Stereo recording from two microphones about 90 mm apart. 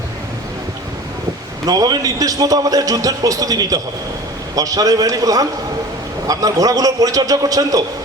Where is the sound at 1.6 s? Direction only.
45° right (ahead or behind).